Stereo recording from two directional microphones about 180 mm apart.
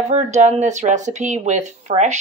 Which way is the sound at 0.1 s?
40° right (ahead or behind).